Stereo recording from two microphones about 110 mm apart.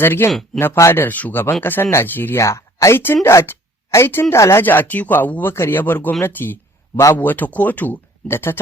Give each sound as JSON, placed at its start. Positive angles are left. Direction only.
{"t": 0.0, "sound": "speech", "side_deg": 20}
{"t": 0.3, "sound": "speech", "side_deg": 0}
{"t": 0.6, "sound": "speech", "side_deg": 20}